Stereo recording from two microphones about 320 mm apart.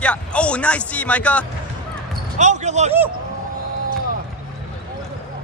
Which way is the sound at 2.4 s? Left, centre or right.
Right.